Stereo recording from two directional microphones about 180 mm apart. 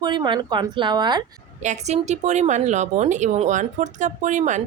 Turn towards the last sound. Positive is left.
turn(degrees=-40)  # may be behind; listen again after turning